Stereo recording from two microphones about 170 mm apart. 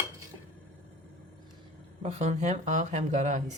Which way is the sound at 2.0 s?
40° right (ahead or behind).